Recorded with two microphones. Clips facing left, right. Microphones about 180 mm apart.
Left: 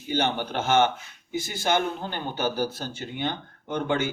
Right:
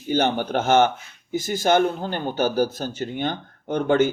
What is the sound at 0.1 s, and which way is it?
Speech, 45° right (ahead or behind).